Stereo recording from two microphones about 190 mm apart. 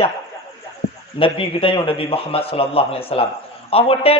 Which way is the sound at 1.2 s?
30° left (ahead or behind).